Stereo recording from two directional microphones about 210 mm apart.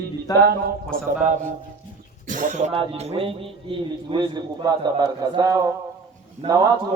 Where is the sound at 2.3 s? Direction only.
40° right (ahead or behind); by 5.7 s 20° right (ahead or behind).